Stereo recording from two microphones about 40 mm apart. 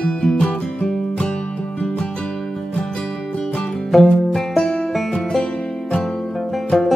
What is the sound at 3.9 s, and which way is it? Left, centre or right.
Music, centre.